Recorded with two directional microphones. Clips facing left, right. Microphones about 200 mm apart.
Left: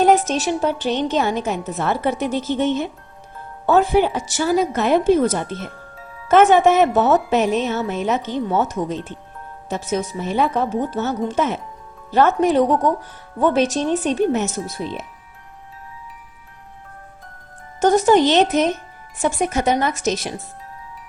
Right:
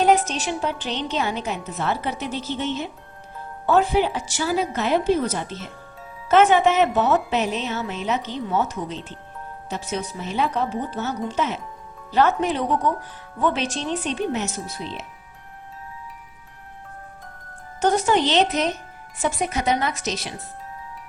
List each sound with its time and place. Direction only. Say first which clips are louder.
0.3 s a woman's voice: left 6 dB; 45° left (ahead or behind)
17.7 s a woman's voice: left 6 dB; 45° left (ahead or behind)